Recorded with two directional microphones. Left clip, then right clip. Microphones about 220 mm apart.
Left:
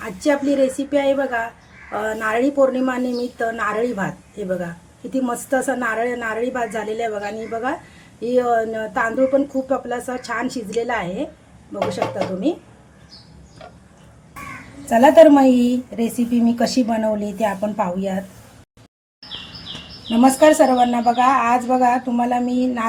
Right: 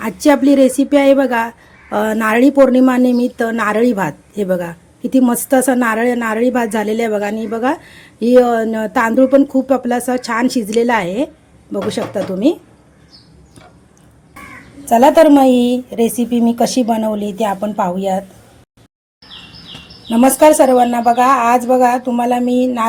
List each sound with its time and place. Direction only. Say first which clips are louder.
0.0 s speech: right 7 dB; 45° right (ahead or behind)
14.8 s speech: right 2 dB; 30° right (ahead or behind)
20.1 s speech: right 4 dB; 40° right (ahead or behind)